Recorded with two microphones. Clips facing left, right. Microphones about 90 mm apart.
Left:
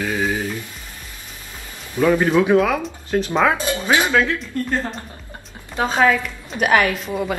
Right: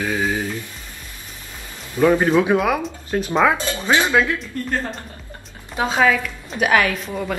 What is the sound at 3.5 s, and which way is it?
Speech, 20° left (ahead or behind).